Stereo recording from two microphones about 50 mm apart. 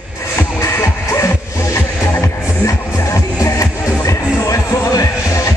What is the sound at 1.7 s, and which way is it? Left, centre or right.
Music, left.